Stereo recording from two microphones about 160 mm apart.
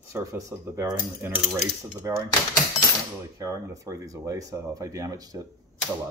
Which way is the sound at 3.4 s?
20° right (ahead or behind).